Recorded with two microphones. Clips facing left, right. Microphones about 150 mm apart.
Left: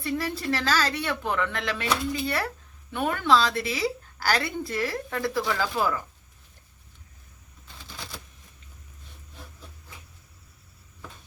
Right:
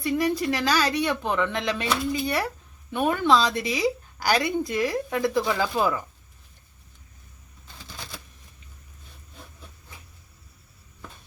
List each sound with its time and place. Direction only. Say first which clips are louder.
0.0 s a woman's voice: right 5 dB; 15° right (ahead or behind)